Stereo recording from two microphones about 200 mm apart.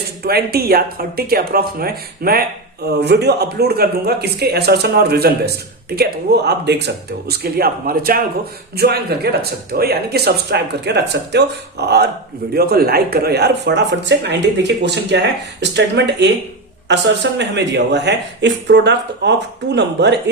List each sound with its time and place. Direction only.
0.2 s speech: 50° right (ahead or behind)